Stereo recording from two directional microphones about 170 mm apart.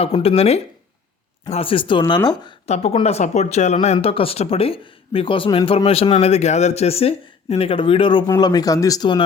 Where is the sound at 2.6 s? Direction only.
40° left (ahead or behind).